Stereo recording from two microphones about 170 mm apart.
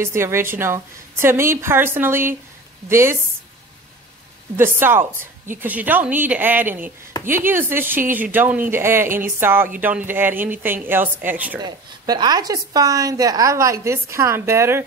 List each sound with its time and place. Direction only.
0.0 s speech: 15° right (ahead or behind)
4.6 s speech: 15° right (ahead or behind)
11.6 s a woman's voice: 25° right (ahead or behind)